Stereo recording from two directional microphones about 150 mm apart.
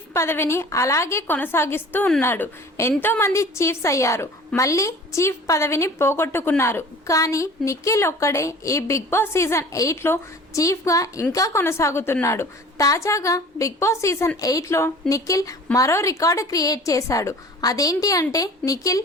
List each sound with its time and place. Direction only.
0.1 s a woman's voice: 15° left (ahead or behind)